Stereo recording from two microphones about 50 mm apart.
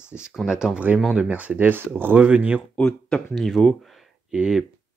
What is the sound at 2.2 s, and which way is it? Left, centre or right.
Speech, right.